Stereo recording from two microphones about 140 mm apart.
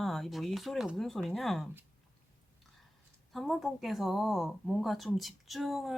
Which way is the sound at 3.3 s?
Centre (ahead or behind).